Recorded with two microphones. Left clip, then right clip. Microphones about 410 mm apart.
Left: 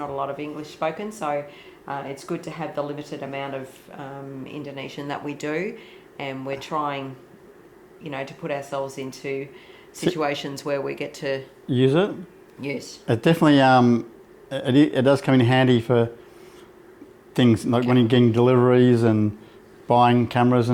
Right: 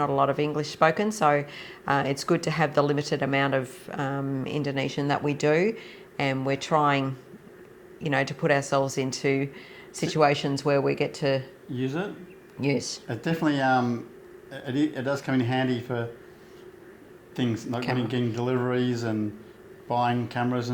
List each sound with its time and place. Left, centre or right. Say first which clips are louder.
0.0 s speech: right 5 dB; right
8.0 s speech: right 6 dB; right
11.7 s speech: left 11 dB; left
13.1 s speech: left 10 dB; left
17.3 s speech: left 10 dB; left